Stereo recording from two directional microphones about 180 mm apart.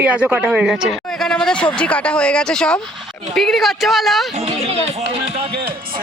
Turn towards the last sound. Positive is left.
turn(degrees=-35)  # may be behind; listen again after turning